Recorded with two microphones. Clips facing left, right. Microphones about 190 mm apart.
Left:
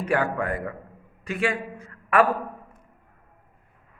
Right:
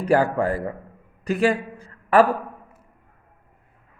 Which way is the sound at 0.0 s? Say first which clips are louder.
Right 5 dB; 35° right (ahead or behind).